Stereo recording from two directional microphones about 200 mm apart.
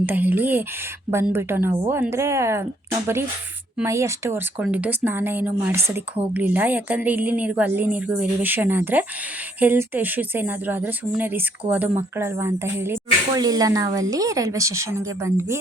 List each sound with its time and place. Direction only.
0.0 s speech: 10° right (ahead or behind)
3.8 s speech: 15° right (ahead or behind)